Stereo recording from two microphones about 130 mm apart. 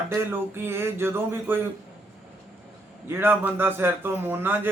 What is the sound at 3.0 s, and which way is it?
A man's voice, 15° right (ahead or behind).